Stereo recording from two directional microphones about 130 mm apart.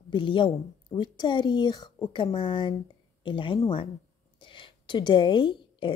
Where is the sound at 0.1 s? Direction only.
40° left (ahead or behind).